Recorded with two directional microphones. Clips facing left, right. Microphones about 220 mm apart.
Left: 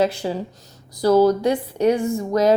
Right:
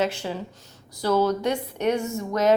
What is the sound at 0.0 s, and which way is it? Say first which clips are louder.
Speech: left 5 dB; 35° left (ahead or behind).